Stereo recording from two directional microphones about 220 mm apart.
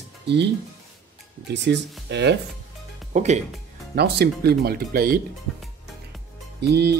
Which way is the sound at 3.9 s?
45° right (ahead or behind).